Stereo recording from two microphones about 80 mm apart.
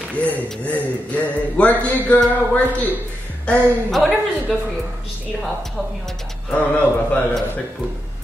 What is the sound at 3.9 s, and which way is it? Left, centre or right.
A woman's voice, centre.